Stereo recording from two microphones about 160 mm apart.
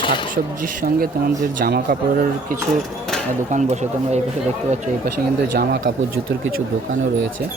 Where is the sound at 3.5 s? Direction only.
45° right (ahead or behind).